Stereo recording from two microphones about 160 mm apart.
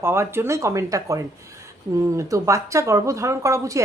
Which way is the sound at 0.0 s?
15° right (ahead or behind).